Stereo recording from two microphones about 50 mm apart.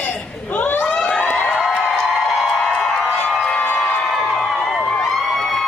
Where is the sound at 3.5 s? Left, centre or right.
Left.